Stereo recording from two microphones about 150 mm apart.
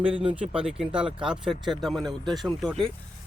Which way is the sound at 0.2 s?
40° right (ahead or behind).